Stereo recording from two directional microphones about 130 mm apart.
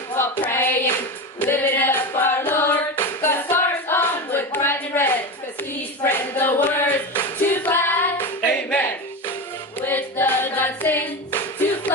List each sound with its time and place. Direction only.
0.2 s hands: 15° left (ahead or behind)
1.4 s music: 15° left (ahead or behind)
6.0 s clapping: 15° left (ahead or behind)
7.6 s music: 15° left (ahead or behind)
9.8 s hands: 15° left (ahead or behind)